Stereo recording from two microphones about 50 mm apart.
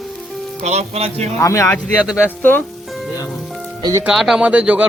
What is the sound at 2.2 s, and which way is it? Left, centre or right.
Speech, left.